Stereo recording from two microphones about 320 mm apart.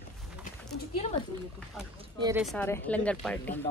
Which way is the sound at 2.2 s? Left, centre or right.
Centre.